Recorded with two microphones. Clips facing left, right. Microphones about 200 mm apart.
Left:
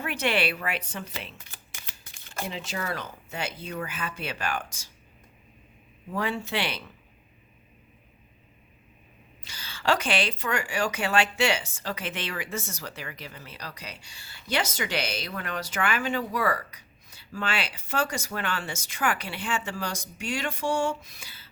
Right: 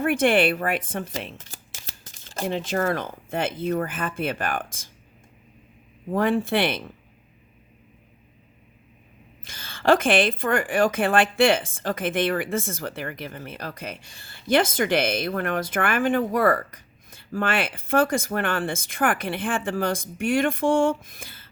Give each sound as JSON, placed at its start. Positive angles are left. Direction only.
{"t": 0.0, "sound": "a woman's voice", "side_deg": -50}
{"t": 6.1, "sound": "a woman's voice", "side_deg": -50}
{"t": 9.4, "sound": "a woman's voice", "side_deg": -50}